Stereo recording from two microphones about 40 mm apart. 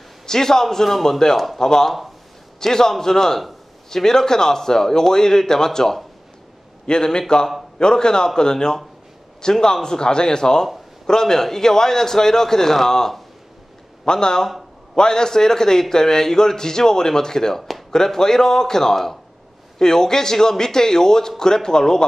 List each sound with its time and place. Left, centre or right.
0.3 s a man's voice: centre